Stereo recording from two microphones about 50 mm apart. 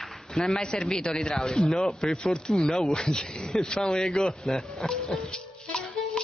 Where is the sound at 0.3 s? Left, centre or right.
Centre.